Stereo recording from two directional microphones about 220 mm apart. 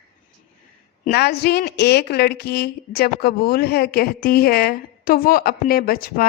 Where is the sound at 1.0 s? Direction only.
45° left (ahead or behind).